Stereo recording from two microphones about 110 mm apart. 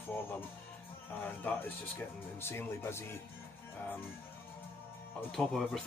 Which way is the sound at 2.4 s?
20° left (ahead or behind).